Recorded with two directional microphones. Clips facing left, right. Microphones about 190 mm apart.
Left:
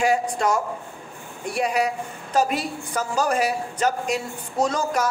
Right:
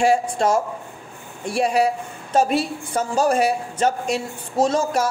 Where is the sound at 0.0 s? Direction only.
30° right (ahead or behind).